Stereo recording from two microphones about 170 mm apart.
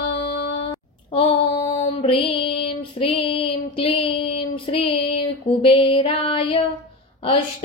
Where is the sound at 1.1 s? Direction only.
35° left (ahead or behind).